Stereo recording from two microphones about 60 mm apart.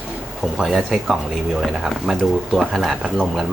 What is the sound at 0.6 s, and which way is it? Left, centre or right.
Speech, centre.